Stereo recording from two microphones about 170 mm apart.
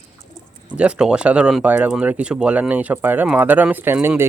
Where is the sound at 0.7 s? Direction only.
5° right (ahead or behind).